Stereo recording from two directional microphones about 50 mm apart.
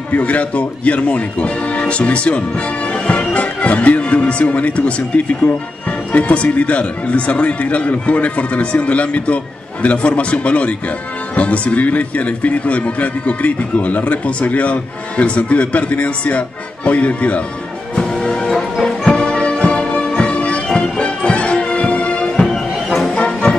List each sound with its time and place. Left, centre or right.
0.1 s speech: left
2.9 s music: left
3.3 s speech: left
17.9 s music: centre
22.4 s music: centre
23.0 s music: left